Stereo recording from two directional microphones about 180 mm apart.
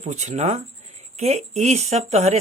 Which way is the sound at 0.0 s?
40° right (ahead or behind).